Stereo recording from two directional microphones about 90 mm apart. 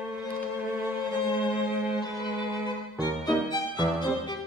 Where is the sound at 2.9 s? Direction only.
50° left (ahead or behind).